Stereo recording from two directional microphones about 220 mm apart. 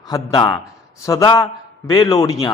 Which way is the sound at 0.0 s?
20° left (ahead or behind).